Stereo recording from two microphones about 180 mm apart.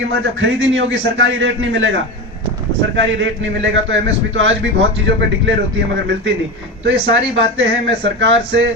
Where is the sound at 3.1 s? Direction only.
90° right.